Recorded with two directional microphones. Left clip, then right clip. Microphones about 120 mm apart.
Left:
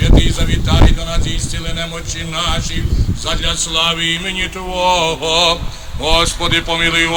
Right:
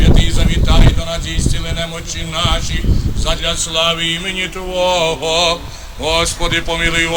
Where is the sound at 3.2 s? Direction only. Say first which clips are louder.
Even; 45° left (ahead or behind).